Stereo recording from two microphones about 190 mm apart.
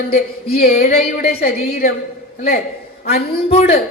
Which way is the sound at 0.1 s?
55° left (ahead or behind).